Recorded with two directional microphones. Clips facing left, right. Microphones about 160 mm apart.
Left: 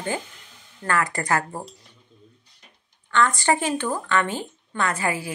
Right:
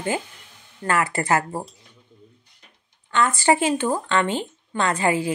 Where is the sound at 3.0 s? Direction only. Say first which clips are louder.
Even; 15° right (ahead or behind).